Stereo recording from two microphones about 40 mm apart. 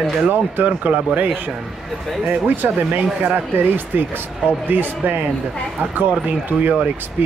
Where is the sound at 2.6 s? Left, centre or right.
Right.